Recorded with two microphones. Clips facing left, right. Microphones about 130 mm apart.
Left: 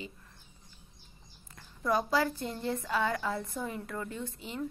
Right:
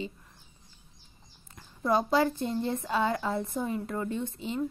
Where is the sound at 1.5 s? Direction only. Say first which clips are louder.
Right 3 dB; 25° right (ahead or behind).